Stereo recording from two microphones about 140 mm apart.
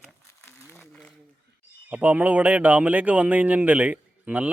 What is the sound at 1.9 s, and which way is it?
Speech, 10° right (ahead or behind).